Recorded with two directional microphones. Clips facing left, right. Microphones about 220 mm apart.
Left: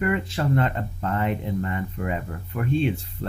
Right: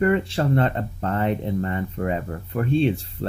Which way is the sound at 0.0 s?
35° right (ahead or behind).